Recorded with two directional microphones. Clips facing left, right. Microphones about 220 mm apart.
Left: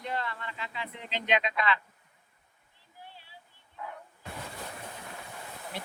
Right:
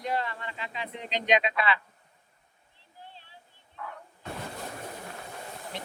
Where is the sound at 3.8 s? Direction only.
15° left (ahead or behind).